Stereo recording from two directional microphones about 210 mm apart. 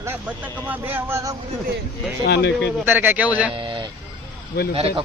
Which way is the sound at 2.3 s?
55° left (ahead or behind).